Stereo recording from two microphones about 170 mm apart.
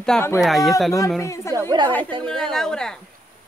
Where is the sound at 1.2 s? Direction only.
15° left (ahead or behind).